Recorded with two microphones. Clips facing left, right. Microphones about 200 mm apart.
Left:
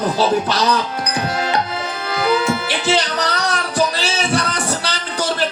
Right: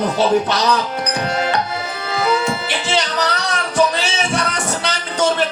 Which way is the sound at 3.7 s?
35° left (ahead or behind).